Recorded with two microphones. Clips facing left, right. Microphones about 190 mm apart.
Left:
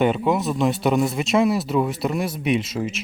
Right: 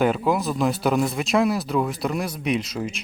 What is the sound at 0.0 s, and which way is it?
Speech, centre (ahead or behind).